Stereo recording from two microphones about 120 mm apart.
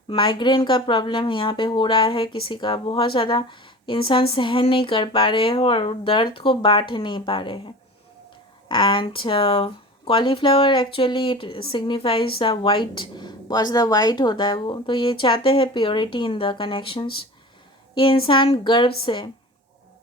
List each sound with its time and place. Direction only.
0.1 s speech: 45° left (ahead or behind)
8.7 s speech: 45° left (ahead or behind)